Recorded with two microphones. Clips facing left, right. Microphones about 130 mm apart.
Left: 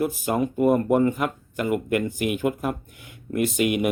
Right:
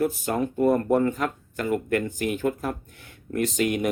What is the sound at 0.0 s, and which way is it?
Speech, 10° left (ahead or behind).